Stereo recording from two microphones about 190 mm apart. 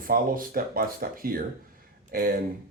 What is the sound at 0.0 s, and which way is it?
Speech, 50° right (ahead or behind).